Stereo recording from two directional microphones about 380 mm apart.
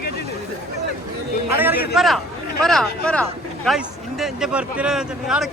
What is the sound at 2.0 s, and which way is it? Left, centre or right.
Speech, centre.